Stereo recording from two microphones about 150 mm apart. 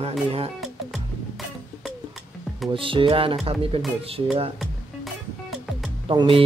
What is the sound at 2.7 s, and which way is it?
Speech, 35° right (ahead or behind).